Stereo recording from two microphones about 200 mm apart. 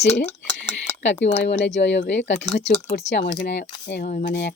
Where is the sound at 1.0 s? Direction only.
60° left (ahead or behind).